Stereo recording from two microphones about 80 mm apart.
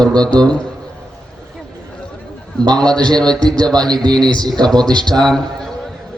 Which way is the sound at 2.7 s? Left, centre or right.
Centre.